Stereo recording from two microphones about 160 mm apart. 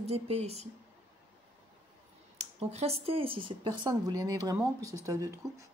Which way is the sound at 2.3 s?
40° right (ahead or behind).